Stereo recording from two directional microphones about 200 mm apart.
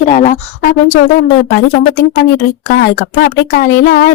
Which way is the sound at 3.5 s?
50° left (ahead or behind).